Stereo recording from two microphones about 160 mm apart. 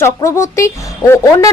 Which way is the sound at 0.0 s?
20° left (ahead or behind).